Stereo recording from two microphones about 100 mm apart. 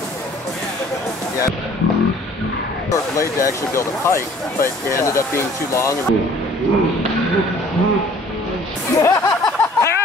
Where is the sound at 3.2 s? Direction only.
30° left (ahead or behind).